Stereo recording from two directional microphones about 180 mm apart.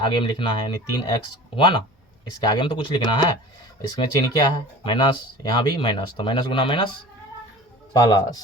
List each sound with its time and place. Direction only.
0.0 s speech: 25° left (ahead or behind)